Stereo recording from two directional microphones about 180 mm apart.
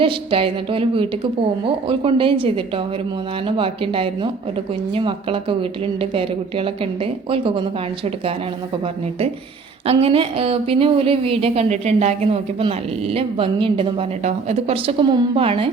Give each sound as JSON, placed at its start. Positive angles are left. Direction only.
{"t": 0.0, "sound": "a woman's voice", "side_deg": -30}
{"t": 9.8, "sound": "a woman's voice", "side_deg": -35}